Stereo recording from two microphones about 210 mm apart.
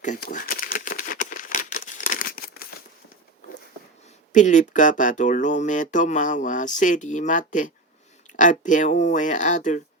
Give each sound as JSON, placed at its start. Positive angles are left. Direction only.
{"t": 0.0, "sound": "crumpling", "side_deg": 35}
{"t": 4.3, "sound": "speech", "side_deg": 35}